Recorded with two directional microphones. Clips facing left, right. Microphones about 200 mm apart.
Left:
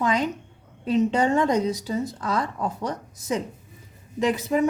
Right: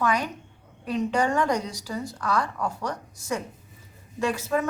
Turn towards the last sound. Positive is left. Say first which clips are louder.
# left 4 dB
turn(degrees=20)  # may be behind; listen again after turning